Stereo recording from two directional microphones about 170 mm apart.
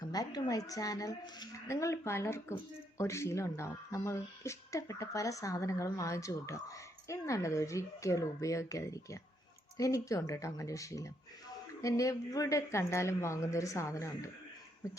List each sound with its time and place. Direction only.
0.0 s speech: 25° left (ahead or behind)